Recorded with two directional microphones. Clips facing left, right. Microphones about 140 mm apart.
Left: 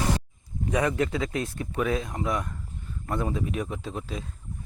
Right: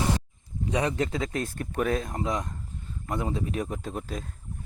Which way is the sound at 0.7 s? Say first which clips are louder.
Left 2 dB; 25° right (ahead or behind).